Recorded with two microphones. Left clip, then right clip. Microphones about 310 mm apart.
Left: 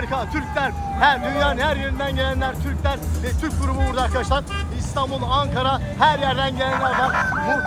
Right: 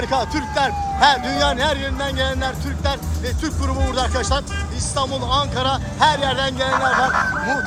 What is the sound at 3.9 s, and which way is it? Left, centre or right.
Speech, centre.